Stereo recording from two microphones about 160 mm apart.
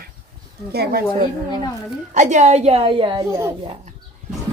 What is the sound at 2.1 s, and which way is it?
A woman's voice, 50° right (ahead or behind).